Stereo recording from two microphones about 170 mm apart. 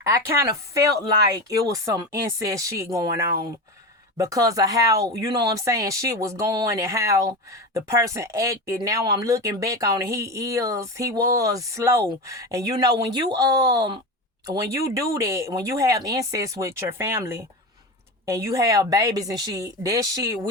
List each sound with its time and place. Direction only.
0.0 s speech: 15° right (ahead or behind)